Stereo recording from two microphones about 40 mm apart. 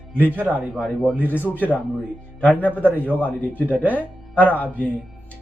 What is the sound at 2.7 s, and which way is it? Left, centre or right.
A man's voice, right.